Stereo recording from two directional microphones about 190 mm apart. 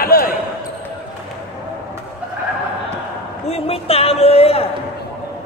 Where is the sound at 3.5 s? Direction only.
30° left (ahead or behind).